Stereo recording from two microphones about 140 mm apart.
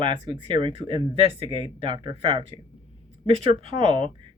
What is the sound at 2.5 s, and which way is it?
Speech, 35° left (ahead or behind).